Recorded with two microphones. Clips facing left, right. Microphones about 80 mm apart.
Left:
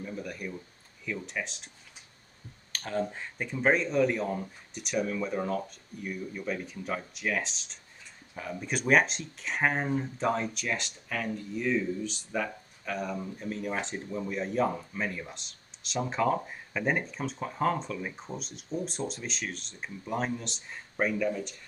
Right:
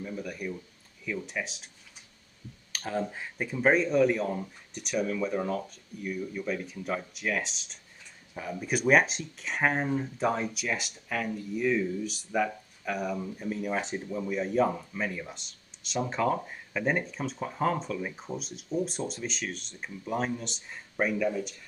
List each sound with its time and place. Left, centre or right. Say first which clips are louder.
0.0 s a sound: right 1 dB; centre
1.0 s speech: right 1 dB; centre
2.7 s speech: even; centre